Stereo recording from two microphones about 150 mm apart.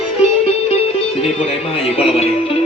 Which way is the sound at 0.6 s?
40° left (ahead or behind).